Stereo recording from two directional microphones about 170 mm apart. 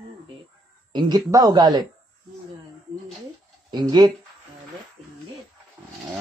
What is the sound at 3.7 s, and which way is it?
Speech, 25° right (ahead or behind).